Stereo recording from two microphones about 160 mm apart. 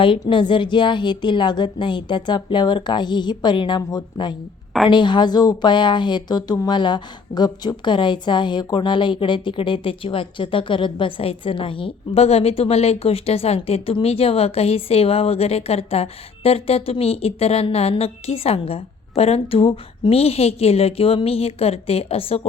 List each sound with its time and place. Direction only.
0.0 s a woman's voice: 30° left (ahead or behind)